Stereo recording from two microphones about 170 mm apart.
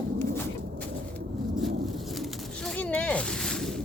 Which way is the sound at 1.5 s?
Centre (ahead or behind).